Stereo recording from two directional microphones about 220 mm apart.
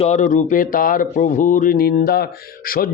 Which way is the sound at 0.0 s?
35° left (ahead or behind).